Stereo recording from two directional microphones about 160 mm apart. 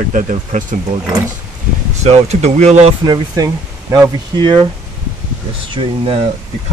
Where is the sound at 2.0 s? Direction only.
40° right (ahead or behind).